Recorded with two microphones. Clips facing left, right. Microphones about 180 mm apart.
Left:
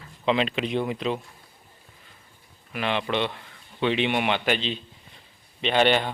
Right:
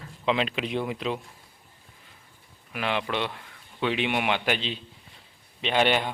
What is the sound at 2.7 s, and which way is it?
Speech, 5° right (ahead or behind).